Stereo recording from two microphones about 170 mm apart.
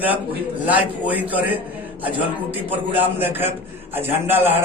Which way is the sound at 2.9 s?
10° right (ahead or behind).